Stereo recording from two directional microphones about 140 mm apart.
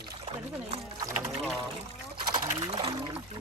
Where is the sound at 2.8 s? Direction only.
45° right (ahead or behind).